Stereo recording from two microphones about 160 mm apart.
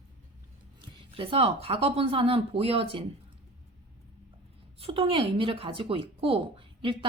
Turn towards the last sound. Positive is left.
turn(degrees=-35)  # may be behind; listen again after turning